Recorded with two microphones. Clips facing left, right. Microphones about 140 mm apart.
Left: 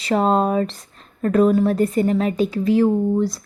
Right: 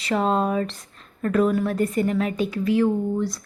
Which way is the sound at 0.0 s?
40° left (ahead or behind).